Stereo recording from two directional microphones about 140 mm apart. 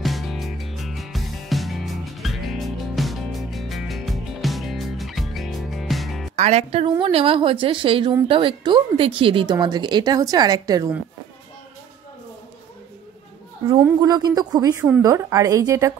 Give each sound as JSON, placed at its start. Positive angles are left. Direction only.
{"t": 0.0, "sound": "music", "side_deg": 0}
{"t": 6.3, "sound": "speech", "side_deg": -50}
{"t": 14.0, "sound": "a woman's voice", "side_deg": -30}